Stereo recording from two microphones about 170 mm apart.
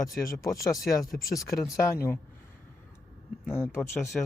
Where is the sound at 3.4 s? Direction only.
15° left (ahead or behind).